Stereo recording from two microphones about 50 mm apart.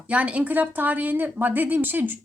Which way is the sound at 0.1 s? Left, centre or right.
Right.